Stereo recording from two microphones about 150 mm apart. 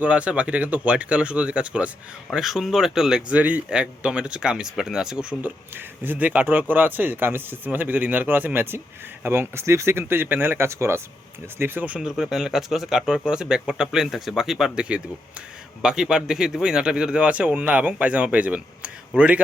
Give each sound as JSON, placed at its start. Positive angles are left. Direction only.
{"t": 0.0, "sound": "speech", "side_deg": -10}